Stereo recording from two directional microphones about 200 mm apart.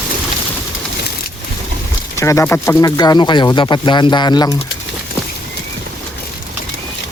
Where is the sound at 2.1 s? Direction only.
15° left (ahead or behind).